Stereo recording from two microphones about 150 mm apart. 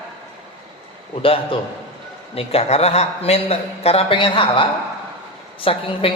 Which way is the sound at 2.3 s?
40° left (ahead or behind).